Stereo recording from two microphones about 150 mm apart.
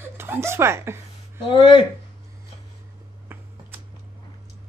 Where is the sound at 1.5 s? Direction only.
30° left (ahead or behind).